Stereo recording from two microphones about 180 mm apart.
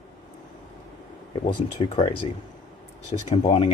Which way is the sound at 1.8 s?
30° left (ahead or behind).